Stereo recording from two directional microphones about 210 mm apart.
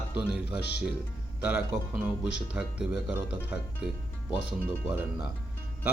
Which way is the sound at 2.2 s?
55° left (ahead or behind).